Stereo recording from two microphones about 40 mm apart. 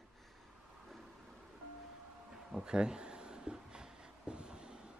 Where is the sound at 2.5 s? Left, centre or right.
Centre.